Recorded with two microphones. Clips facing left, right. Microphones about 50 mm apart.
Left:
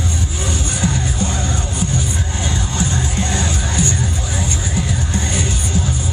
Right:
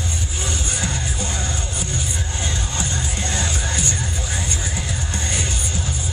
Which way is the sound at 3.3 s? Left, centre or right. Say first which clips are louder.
Left 3 dB; left.